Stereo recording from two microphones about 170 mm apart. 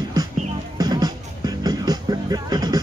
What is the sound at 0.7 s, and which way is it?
Music, 25° right (ahead or behind).